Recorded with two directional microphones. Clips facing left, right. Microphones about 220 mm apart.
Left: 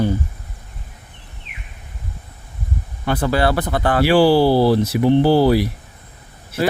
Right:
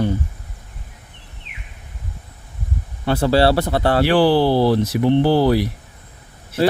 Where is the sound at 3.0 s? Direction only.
30° right (ahead or behind).